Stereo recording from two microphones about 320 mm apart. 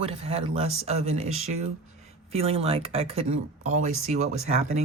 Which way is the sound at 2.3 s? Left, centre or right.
Centre.